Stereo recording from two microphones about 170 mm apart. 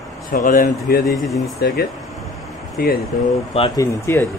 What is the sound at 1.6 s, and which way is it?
Speech, 70° left (ahead or behind).